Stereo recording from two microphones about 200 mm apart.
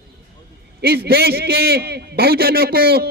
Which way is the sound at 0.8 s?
50° right (ahead or behind).